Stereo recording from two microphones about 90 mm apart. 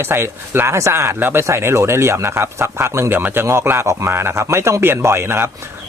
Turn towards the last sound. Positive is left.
turn(degrees=-30)  # may be behind; listen again after turning